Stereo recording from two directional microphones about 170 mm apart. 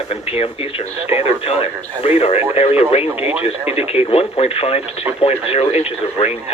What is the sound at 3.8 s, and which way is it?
Speech, 35° left (ahead or behind).